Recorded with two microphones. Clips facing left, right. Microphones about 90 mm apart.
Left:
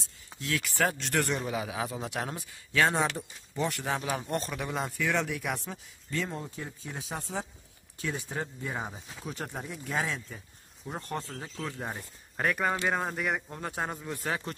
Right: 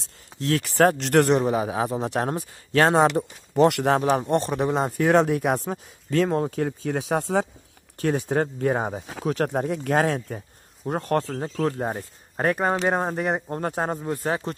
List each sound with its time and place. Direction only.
0.4 s speech: 45° right (ahead or behind); by 1.4 s 65° right (ahead or behind)
1.4 s speech: 40° right (ahead or behind)
2.9 s speech: 85° right
4.1 s speech: 35° right (ahead or behind)
6.0 s speech: 75° right (ahead or behind)
8.0 s speech: 55° right (ahead or behind)
9.1 s speech: 75° right (ahead or behind)
11.8 s speech: 40° right (ahead or behind)